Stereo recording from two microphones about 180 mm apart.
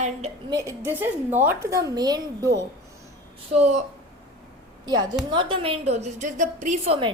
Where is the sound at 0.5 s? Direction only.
15° right (ahead or behind).